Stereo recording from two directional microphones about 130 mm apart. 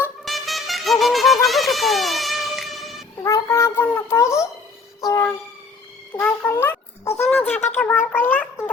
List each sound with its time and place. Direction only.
0.3 s music: centre (ahead or behind)
3.2 s child singing: 25° left (ahead or behind)
3.8 s wind instrument: 15° left (ahead or behind)
4.9 s a sound: 25° left (ahead or behind)
7.3 s wind instrument: 15° left (ahead or behind)
7.8 s a sound: 10° left (ahead or behind)